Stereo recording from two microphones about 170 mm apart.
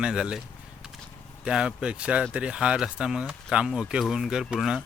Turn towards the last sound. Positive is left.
turn(degrees=-5)  # may be behind; listen again after turning